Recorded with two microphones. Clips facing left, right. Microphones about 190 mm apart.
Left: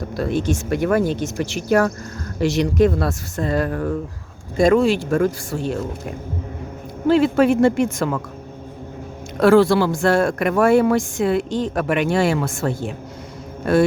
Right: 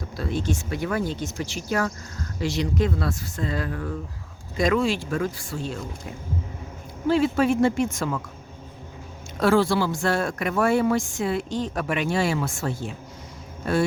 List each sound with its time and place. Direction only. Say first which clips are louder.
0.2 s speech: left 6 dB; 65° left (ahead or behind)
7.1 s speech: left 5 dB; 60° left (ahead or behind)
9.4 s speech: left 7 dB; 65° left (ahead or behind)